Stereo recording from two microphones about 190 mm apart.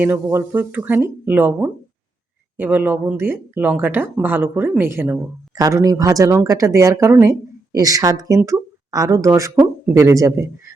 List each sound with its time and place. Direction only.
0.0 s speech: 10° right (ahead or behind)